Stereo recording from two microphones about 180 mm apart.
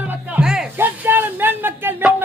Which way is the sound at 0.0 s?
10° right (ahead or behind).